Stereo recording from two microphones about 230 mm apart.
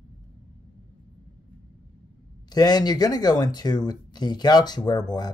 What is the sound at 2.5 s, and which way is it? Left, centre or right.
Speech, centre.